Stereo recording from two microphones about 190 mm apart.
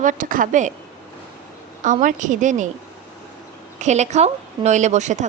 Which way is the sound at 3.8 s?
35° right (ahead or behind).